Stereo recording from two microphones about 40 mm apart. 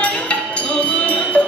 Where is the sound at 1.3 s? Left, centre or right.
Left.